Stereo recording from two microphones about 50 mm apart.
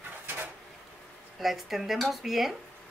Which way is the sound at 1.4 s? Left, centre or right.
Centre.